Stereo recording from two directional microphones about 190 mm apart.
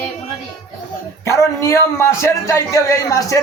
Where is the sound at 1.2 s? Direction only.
15° left (ahead or behind).